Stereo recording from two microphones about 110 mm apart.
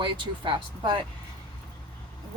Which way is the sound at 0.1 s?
50° right (ahead or behind).